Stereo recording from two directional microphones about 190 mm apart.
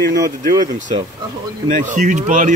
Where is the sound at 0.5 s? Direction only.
40° right (ahead or behind).